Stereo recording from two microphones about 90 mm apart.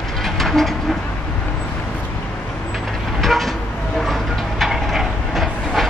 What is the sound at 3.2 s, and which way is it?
Train, centre (ahead or behind).